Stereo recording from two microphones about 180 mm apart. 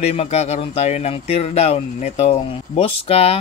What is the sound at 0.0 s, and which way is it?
Speech, 35° left (ahead or behind).